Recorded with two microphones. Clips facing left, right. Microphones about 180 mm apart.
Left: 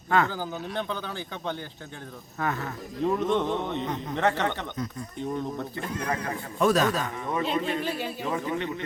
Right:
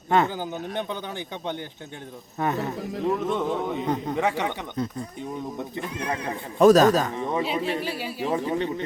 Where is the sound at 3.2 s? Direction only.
5° right (ahead or behind).